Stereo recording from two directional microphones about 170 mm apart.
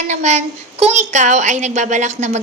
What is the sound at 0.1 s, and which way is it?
A woman's voice, 40° right (ahead or behind).